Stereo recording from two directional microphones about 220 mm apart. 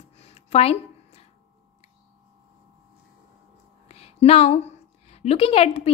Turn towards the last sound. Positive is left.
turn(degrees=30)  # may be behind; listen again after turning